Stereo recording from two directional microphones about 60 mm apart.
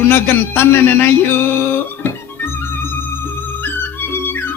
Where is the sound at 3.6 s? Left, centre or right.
Left.